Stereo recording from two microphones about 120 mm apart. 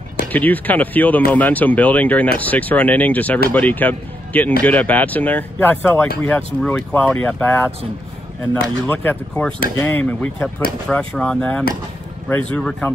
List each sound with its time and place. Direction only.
0.3 s speech: 15° left (ahead or behind)
8.8 s speech: 15° left (ahead or behind)